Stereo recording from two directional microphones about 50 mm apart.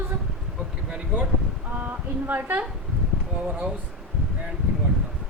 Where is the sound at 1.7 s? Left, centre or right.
Right.